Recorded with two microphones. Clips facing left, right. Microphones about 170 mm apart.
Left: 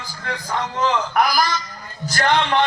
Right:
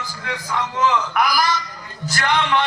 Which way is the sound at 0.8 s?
45° left (ahead or behind).